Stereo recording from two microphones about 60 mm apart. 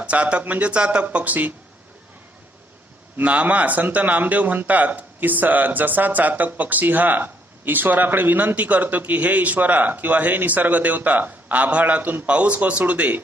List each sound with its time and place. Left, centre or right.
0.0 s speech: right
3.2 s speech: right